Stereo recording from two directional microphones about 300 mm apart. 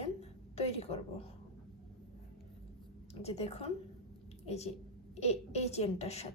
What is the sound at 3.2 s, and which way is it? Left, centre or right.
A woman's voice, left.